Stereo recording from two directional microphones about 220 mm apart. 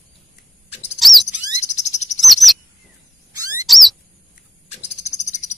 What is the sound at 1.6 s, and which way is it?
Cricket, 30° left (ahead or behind).